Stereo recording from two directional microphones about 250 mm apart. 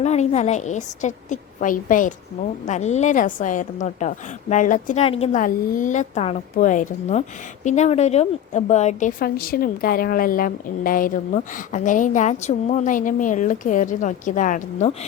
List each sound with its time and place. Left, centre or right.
0.0 s a woman's voice: left